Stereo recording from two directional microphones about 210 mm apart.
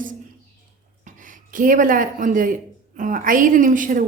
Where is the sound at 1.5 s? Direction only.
40° right (ahead or behind).